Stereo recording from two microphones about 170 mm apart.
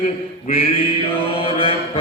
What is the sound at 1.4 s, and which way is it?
Mantra, 30° left (ahead or behind).